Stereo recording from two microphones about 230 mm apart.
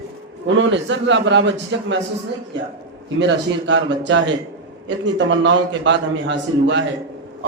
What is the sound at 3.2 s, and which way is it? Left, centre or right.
A man's voice, right.